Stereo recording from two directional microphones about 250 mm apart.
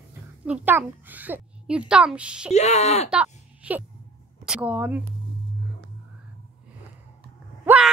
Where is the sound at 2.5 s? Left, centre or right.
Left.